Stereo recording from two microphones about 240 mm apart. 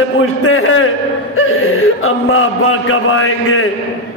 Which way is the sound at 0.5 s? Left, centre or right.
Left.